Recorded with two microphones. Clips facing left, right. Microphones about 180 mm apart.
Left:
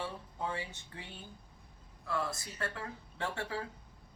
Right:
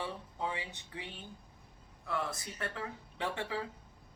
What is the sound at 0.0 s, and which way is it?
A woman's voice, 15° right (ahead or behind).